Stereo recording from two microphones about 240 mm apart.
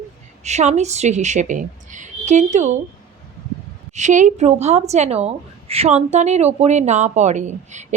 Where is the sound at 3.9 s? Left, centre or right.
Right.